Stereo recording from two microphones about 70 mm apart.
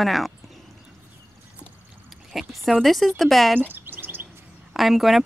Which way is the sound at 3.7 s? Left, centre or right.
Right.